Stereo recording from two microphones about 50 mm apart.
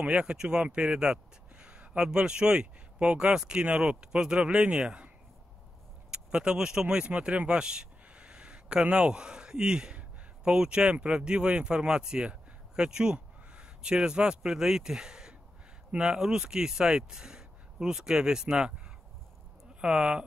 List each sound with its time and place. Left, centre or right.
0.0 s speech: centre
19.8 s speech: centre